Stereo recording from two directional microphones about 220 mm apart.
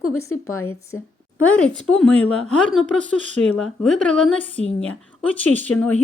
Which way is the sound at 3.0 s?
35° right (ahead or behind).